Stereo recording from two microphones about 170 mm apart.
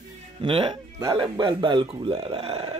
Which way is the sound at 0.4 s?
30° right (ahead or behind).